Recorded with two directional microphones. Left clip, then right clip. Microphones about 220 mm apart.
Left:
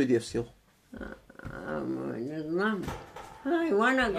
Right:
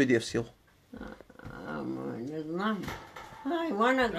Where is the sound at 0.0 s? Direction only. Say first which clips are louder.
Right 1 dB; 45° right (ahead or behind).